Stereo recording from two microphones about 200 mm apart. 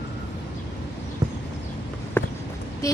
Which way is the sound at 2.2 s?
10° left (ahead or behind).